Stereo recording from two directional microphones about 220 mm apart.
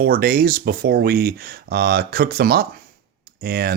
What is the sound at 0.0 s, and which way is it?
Speech, 45° right (ahead or behind).